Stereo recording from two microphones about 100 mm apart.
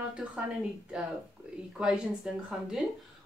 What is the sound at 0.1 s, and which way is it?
Speech, 10° right (ahead or behind).